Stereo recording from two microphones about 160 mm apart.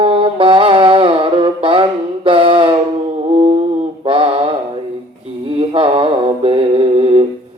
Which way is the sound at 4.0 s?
35° right (ahead or behind).